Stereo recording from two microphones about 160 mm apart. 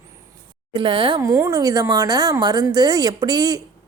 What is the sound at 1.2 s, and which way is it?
Speech, 20° right (ahead or behind).